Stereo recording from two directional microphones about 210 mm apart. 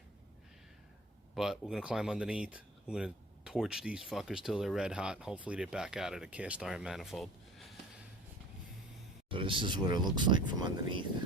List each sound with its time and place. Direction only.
1.4 s speech: 5° right (ahead or behind)
9.3 s speech: 25° right (ahead or behind)